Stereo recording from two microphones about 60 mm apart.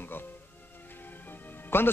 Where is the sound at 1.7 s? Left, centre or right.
Left.